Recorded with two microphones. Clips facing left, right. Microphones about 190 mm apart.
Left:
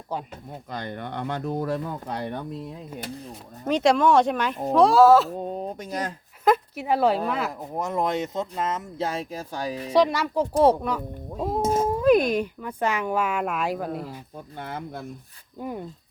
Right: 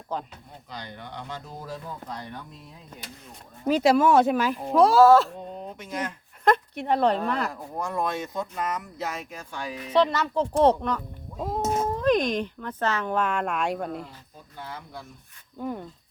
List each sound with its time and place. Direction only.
0.1 s speech: 10° left (ahead or behind)
0.7 s speech: 55° left (ahead or behind)
3.7 s speech: 5° right (ahead or behind)
5.4 s speech: 40° left (ahead or behind)
6.4 s a woman's voice: 5° left (ahead or behind)
7.6 s speech: 20° left (ahead or behind)
9.9 s speech: 10° left (ahead or behind)
14.6 s speech: 55° left (ahead or behind)